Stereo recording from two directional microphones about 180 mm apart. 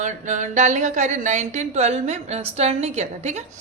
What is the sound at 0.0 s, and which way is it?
A woman's voice, 40° right (ahead or behind).